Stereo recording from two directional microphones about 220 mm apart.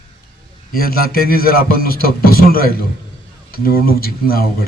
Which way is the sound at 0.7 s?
45° left (ahead or behind).